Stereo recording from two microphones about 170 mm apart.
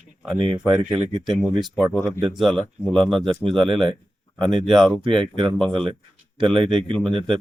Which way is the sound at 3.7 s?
30° right (ahead or behind).